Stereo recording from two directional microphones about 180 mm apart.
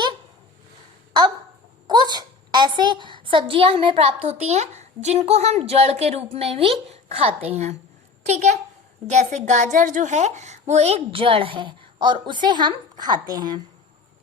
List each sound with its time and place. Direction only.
1.9 s a woman's voice: 25° right (ahead or behind)